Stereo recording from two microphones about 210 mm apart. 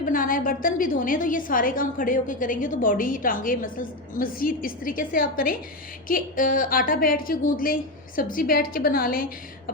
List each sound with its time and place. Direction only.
0.0 s a woman's voice: 40° left (ahead or behind)